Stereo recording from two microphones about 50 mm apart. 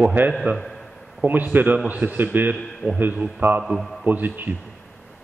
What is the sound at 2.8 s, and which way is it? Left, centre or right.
Speech, right.